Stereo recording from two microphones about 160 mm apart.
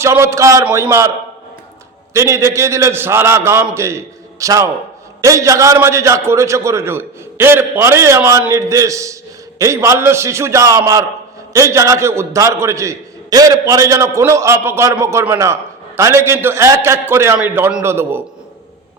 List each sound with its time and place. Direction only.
0.0 s a man's voice: 15° right (ahead or behind)
2.1 s a man's voice: 20° right (ahead or behind)